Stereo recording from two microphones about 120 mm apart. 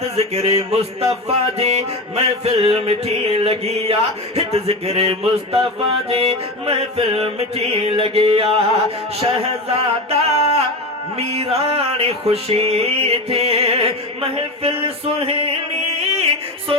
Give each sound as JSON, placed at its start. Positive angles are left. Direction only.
{"t": 0.0, "sound": "music", "side_deg": -60}
{"t": 6.1, "sound": "mantra", "side_deg": -55}
{"t": 9.2, "sound": "music", "side_deg": -55}